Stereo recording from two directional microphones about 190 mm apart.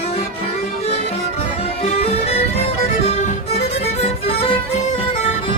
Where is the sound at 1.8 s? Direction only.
30° left (ahead or behind).